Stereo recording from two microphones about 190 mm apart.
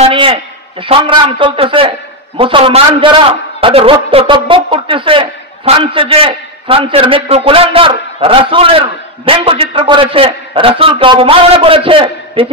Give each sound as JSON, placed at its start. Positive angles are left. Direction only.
{"t": 0.0, "sound": "a man's voice", "side_deg": -30}